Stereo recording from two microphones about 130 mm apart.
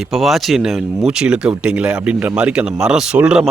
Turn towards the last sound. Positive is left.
turn(degrees=-5)  # may be behind; listen again after turning